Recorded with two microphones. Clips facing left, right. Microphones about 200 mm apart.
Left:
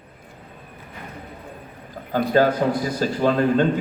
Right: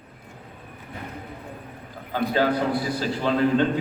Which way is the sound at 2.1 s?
45° left (ahead or behind).